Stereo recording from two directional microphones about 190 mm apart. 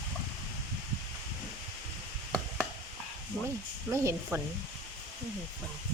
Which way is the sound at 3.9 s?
10° right (ahead or behind).